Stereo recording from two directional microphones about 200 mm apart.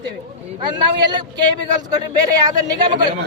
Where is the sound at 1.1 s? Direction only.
20° right (ahead or behind).